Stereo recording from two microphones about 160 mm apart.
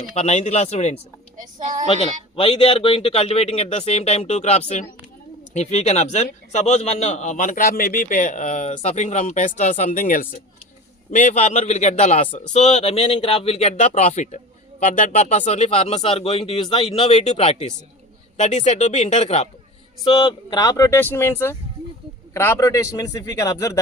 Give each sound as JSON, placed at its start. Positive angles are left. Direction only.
{"t": 0.2, "sound": "a man's voice", "side_deg": 45}
{"t": 1.4, "sound": "speech", "side_deg": -50}
{"t": 2.3, "sound": "a man's voice", "side_deg": 35}
{"t": 20.1, "sound": "speech", "side_deg": 30}